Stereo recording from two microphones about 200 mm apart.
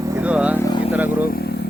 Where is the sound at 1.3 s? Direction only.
50° left (ahead or behind).